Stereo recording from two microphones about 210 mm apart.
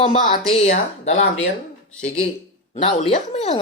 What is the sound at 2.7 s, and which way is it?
Speech, 30° left (ahead or behind).